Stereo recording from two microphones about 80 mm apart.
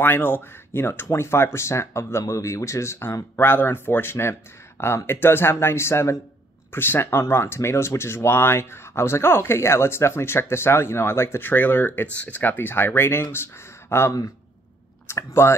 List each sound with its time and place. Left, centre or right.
0.0 s speech: left